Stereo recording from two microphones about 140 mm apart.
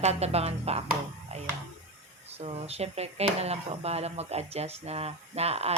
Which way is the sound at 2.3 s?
45° right (ahead or behind).